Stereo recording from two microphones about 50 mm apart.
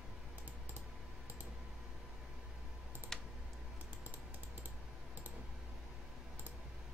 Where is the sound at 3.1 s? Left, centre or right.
Centre.